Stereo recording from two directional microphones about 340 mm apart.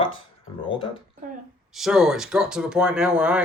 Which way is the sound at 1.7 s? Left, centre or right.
Centre.